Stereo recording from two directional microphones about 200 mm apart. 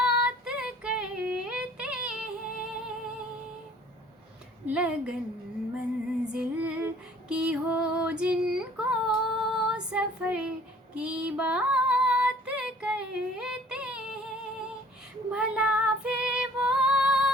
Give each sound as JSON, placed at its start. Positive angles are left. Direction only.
{"t": 0.0, "sound": "female singing", "side_deg": -5}
{"t": 4.7, "sound": "speech", "side_deg": -5}
{"t": 6.2, "sound": "female singing", "side_deg": -5}
{"t": 15.3, "sound": "female singing", "side_deg": -5}